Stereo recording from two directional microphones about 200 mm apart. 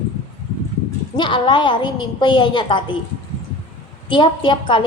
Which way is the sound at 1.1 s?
25° left (ahead or behind).